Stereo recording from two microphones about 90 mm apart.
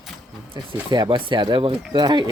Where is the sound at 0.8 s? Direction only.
50° right (ahead or behind).